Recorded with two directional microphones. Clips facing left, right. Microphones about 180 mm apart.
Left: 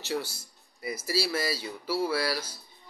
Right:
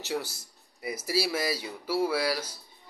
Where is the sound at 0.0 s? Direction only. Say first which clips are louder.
Even; 20° right (ahead or behind).